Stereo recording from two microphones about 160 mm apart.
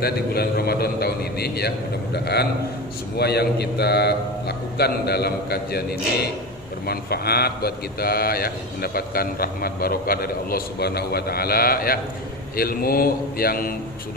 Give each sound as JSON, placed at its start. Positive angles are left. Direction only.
{"t": 0.0, "sound": "a man's voice", "side_deg": 75}